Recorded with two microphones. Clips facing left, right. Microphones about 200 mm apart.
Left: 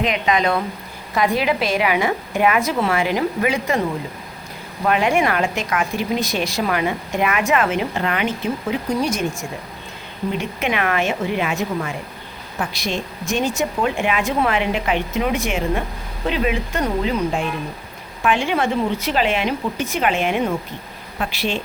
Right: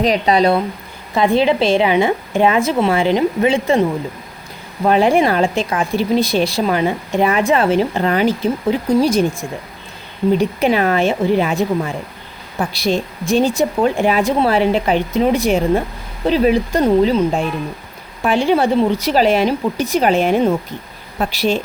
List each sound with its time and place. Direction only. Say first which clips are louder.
0.0 s a woman's voice: right 5 dB; 35° right (ahead or behind)
4.9 s a woman's voice: right 5 dB; 35° right (ahead or behind)